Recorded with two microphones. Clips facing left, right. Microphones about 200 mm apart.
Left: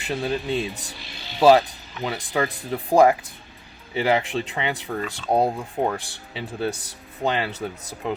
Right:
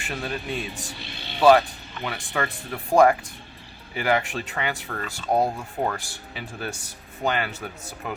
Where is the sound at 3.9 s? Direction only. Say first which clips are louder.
Left 2 dB; 25° left (ahead or behind).